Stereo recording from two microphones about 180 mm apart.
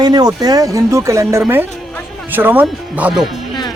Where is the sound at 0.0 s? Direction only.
20° right (ahead or behind).